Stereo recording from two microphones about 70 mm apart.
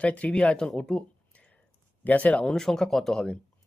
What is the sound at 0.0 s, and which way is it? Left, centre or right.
Speech, centre.